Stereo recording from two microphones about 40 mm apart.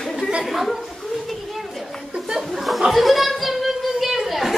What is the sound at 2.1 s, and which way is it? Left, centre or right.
Chuckle, centre.